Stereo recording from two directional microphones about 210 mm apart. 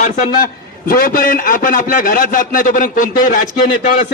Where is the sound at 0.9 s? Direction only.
40° left (ahead or behind).